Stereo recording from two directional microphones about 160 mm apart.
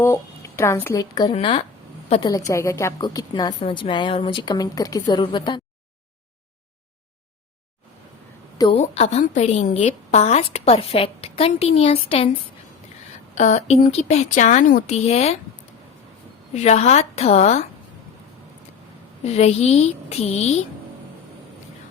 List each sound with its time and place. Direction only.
0.0 s a woman's voice: 15° left (ahead or behind); by 1.6 s 35° left (ahead or behind)
2.2 s a woman's voice: 20° left (ahead or behind)
8.5 s a woman's voice: 30° left (ahead or behind)
8.8 s a woman's voice: 45° left (ahead or behind)
13.3 s speech: 45° left (ahead or behind)
16.6 s speech: 45° left (ahead or behind)
19.2 s a woman's voice: 40° left (ahead or behind)